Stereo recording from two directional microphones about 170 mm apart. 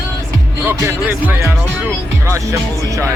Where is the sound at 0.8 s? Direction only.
15° right (ahead or behind).